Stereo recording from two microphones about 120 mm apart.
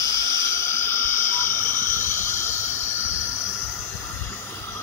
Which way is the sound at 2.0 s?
90° left.